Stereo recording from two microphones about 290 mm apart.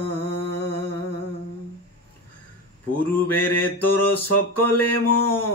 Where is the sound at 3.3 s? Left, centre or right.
Left.